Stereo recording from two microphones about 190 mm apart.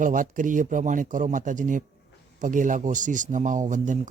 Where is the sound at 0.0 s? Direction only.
45° right (ahead or behind).